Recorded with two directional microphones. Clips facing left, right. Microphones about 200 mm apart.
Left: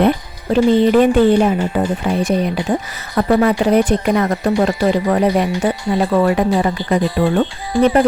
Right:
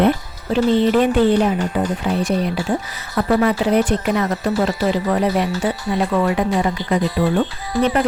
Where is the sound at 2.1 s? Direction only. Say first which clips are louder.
Left 3 dB; 50° left (ahead or behind).